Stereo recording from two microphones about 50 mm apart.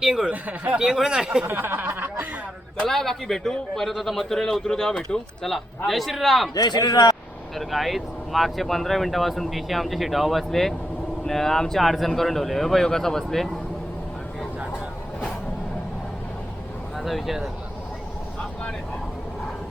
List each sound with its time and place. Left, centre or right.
0.0 s speech: centre
0.3 s speech: right
0.8 s speech: centre
1.5 s speech: right
2.8 s a man's voice: centre
5.5 s speech: centre
7.5 s speech: centre
17.0 s speech: centre